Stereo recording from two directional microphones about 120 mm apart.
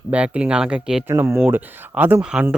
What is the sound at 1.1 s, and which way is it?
Speech, 20° right (ahead or behind).